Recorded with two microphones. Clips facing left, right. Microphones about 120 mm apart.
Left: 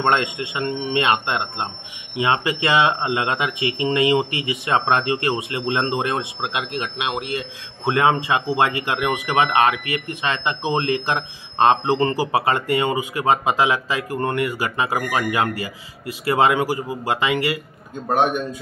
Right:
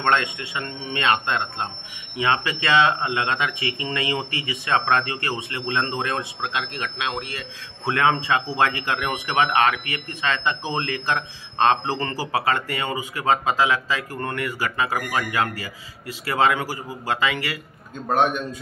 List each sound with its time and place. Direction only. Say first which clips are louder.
0.0 s a man's voice: left 2 dB; 20° left (ahead or behind)